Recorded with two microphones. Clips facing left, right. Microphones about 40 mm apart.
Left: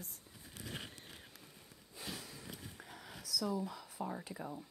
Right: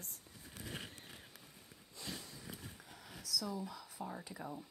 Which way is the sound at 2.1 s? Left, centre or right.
Centre.